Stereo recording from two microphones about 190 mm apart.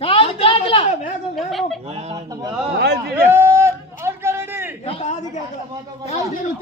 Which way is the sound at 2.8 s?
60° right (ahead or behind).